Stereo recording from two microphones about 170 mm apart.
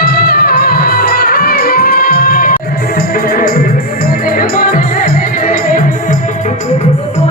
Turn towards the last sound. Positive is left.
turn(degrees=55)  # may be behind; listen again after turning